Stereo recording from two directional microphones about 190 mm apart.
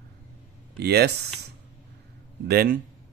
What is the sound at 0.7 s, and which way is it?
Speech, 60° right (ahead or behind).